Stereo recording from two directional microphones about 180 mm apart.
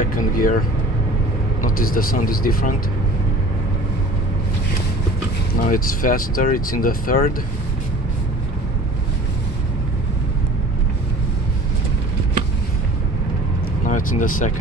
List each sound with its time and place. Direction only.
0.1 s speech: 50° left (ahead or behind)
1.6 s speech: 50° left (ahead or behind)
5.6 s speech: 50° left (ahead or behind)
13.8 s speech: 45° left (ahead or behind)